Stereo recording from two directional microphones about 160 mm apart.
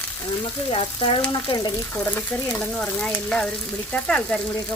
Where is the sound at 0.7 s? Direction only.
35° left (ahead or behind).